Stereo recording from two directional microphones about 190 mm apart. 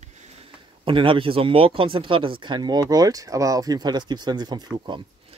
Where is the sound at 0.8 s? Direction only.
25° right (ahead or behind).